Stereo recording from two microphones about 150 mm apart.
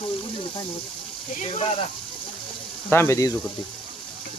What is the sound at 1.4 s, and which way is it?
Speech, 40° left (ahead or behind).